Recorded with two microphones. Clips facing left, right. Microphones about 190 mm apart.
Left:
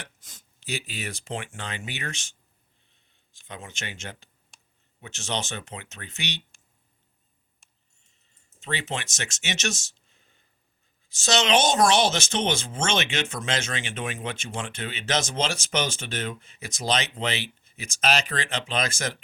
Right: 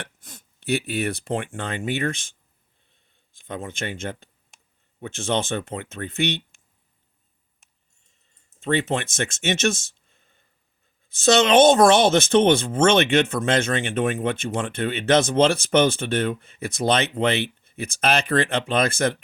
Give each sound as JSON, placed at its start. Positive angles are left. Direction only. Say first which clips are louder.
{"t": 0.0, "sound": "speech", "louder": "right 6 dB", "side_deg": -60}
{"t": 3.3, "sound": "speech", "louder": "right 9 dB", "side_deg": -55}
{"t": 8.6, "sound": "speech", "louder": "right 9 dB", "side_deg": -55}